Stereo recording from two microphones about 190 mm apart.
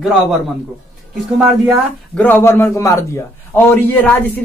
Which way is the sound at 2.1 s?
10° left (ahead or behind).